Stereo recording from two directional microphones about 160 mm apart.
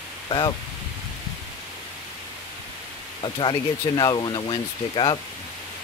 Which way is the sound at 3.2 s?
30° left (ahead or behind).